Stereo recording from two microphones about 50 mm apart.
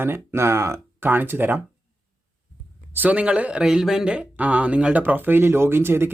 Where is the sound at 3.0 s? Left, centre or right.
Right; by 4.1 s centre.